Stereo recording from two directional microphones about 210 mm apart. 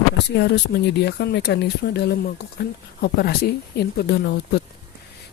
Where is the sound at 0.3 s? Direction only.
55° left (ahead or behind).